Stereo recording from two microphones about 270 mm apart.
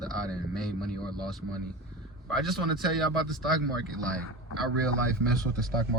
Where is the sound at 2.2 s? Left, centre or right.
Centre.